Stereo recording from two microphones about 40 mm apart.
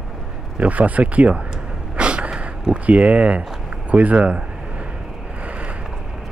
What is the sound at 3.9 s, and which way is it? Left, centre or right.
Speech, right.